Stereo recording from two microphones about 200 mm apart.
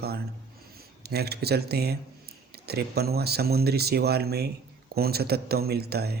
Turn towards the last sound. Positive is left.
turn(degrees=-50)  # may be behind; listen again after turning